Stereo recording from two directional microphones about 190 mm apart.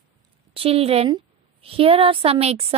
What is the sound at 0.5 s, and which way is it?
A woman's voice, 30° right (ahead or behind).